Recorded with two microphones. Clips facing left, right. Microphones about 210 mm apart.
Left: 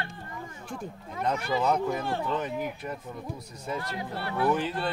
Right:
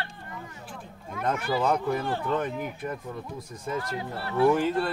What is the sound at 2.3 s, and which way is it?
Speech, 55° right (ahead or behind).